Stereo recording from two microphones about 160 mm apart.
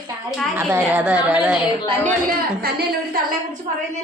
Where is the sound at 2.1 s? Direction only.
70° right (ahead or behind).